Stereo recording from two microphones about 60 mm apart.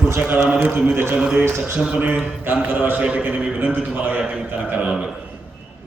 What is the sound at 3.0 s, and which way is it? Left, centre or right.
Speech, right.